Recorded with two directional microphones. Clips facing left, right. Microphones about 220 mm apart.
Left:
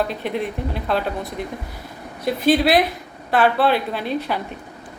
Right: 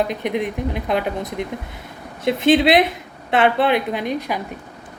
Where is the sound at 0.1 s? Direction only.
15° right (ahead or behind).